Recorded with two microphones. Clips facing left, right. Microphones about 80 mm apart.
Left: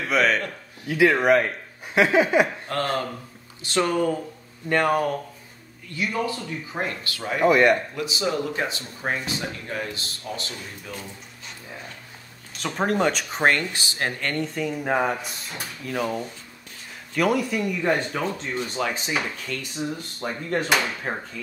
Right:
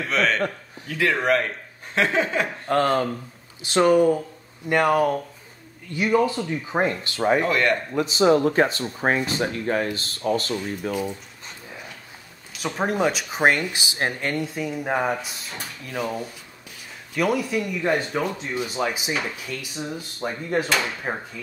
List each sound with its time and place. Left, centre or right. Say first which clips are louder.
0.1 s speech: left 1 dB; centre
2.7 s speech: right 5 dB; right
7.4 s speech: left 4 dB; centre
7.9 s speech: right 8 dB; right
12.5 s speech: even; centre